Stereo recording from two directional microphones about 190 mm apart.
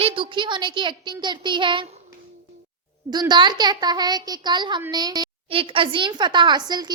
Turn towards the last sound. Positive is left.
turn(degrees=-20)  # may be behind; listen again after turning